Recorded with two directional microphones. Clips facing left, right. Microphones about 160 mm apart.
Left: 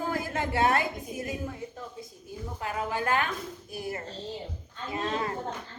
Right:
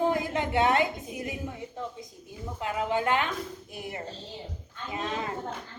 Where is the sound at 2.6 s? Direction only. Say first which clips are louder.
Right 3 dB; 20° right (ahead or behind).